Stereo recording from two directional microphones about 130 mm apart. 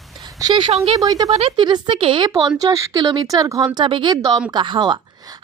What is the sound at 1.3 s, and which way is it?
Speech, 50° right (ahead or behind).